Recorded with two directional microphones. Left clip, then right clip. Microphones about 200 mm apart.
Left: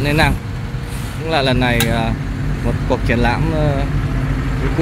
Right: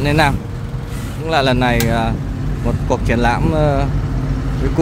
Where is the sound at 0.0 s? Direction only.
10° right (ahead or behind).